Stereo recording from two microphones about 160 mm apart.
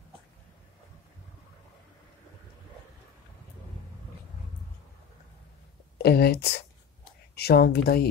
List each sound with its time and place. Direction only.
6.0 s speech: 80° left